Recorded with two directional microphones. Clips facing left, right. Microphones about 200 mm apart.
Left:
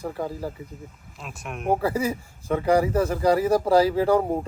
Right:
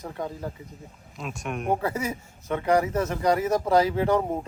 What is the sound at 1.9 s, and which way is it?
A man's voice, 30° left (ahead or behind).